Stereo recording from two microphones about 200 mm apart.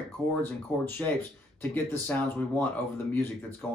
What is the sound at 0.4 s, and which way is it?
Speech, 10° left (ahead or behind).